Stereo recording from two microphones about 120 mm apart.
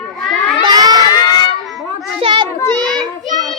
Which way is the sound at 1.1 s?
35° left (ahead or behind).